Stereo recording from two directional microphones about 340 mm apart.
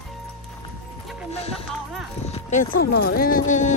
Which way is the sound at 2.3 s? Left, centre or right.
Left.